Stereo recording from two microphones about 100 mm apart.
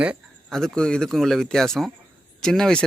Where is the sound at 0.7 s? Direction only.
10° left (ahead or behind).